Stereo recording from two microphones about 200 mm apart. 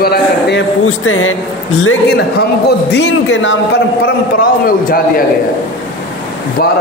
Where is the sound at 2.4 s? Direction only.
55° left (ahead or behind).